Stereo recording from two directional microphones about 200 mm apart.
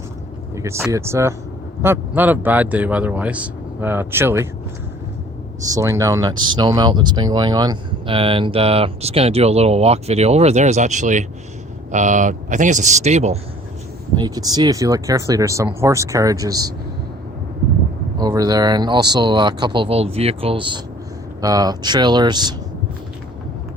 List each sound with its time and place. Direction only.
0.5 s speech: 15° right (ahead or behind)
5.6 s speech: 15° right (ahead or behind); by 13.4 s 35° right (ahead or behind)
14.2 s speech: 20° right (ahead or behind)
18.2 s speech: 20° right (ahead or behind)